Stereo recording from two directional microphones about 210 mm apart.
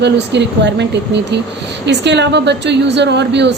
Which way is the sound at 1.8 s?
55° right (ahead or behind).